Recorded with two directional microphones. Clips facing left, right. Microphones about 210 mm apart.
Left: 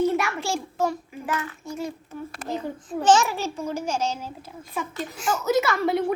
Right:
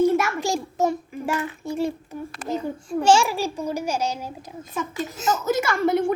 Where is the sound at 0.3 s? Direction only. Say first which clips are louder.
Right 3 dB; 15° right (ahead or behind).